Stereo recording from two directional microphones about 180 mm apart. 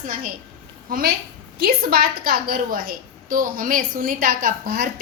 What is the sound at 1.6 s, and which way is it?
A woman's voice, 55° right (ahead or behind).